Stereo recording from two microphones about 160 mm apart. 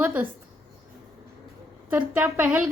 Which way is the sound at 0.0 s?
15° right (ahead or behind).